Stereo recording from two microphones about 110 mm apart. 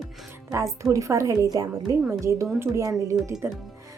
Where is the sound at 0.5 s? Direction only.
30° right (ahead or behind).